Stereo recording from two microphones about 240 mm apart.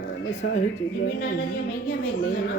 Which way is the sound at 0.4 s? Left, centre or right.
Left.